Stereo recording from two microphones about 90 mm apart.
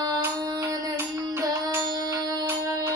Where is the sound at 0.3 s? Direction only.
45° right (ahead or behind).